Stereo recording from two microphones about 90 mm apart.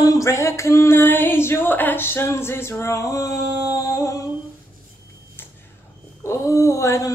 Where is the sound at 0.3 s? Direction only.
35° left (ahead or behind).